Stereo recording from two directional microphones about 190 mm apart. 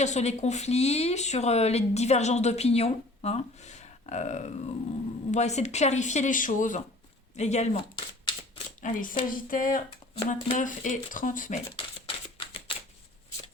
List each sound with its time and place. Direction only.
0.0 s speech: 35° left (ahead or behind)
7.9 s shuffling cards: 25° left (ahead or behind)
8.8 s speech: 45° left (ahead or behind)
12.0 s shuffling cards: 30° left (ahead or behind)